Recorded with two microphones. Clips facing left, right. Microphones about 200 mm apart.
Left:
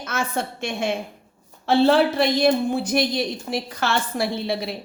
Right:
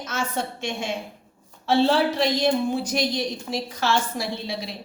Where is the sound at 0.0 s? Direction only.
55° left (ahead or behind).